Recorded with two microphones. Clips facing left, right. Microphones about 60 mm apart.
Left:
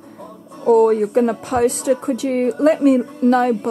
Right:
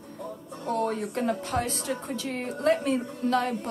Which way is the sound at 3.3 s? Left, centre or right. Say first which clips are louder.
Left 10 dB; left.